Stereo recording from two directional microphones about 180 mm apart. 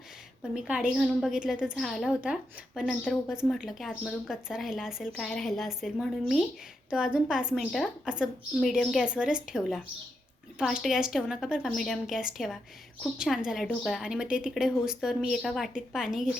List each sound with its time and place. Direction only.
0.5 s speech: 5° right (ahead or behind)